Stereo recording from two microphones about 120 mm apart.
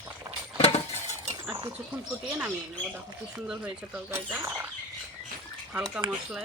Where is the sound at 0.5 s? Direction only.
60° left (ahead or behind).